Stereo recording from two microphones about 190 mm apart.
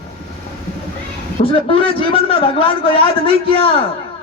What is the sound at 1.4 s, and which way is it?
A man's voice, 30° left (ahead or behind).